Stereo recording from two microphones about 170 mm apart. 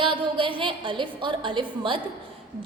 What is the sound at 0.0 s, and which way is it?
A woman's voice, 30° right (ahead or behind).